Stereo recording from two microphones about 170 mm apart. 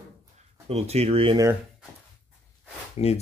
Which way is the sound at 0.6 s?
40° right (ahead or behind).